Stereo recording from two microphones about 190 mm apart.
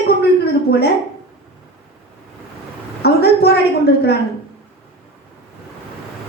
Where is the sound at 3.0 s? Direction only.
55° left (ahead or behind).